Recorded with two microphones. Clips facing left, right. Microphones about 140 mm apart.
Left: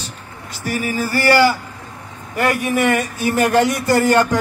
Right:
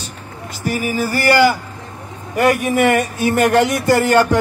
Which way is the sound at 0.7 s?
15° right (ahead or behind).